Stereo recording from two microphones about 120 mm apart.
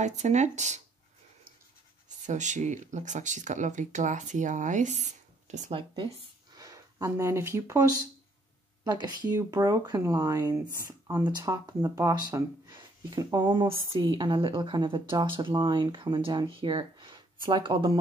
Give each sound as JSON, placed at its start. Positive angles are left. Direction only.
{"t": 0.0, "sound": "speech", "side_deg": -75}
{"t": 2.2, "sound": "speech", "side_deg": -90}
{"t": 5.7, "sound": "speech", "side_deg": -50}
{"t": 6.5, "sound": "speech", "side_deg": -30}